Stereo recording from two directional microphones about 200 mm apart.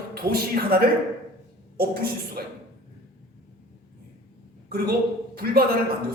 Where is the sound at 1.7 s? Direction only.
50° right (ahead or behind).